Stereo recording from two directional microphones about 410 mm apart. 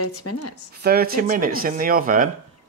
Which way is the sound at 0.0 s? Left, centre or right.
Left.